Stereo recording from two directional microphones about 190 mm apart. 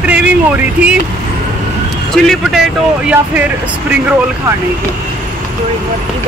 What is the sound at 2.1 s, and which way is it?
Speech, centre (ahead or behind).